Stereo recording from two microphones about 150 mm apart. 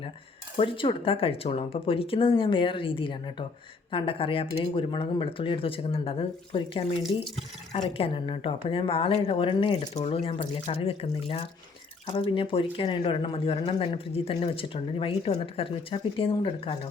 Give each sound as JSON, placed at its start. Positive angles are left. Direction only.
{"t": 0.5, "sound": "speech", "side_deg": 35}